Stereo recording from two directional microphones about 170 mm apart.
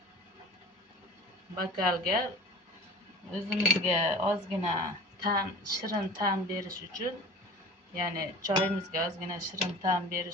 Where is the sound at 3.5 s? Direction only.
5° right (ahead or behind).